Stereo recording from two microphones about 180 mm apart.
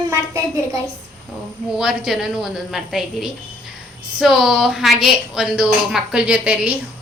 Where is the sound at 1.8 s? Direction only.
5° right (ahead or behind).